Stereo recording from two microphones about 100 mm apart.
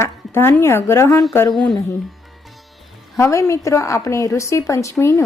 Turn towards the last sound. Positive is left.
turn(degrees=25)  # may be behind; listen again after turning